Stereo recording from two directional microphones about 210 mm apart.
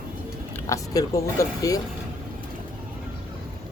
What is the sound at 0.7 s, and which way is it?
Speech, 15° left (ahead or behind).